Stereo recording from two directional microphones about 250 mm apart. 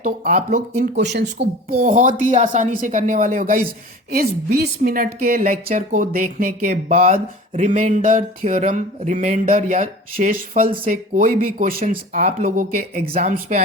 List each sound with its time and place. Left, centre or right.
0.0 s a woman's voice: right
1.8 s a woman's voice: right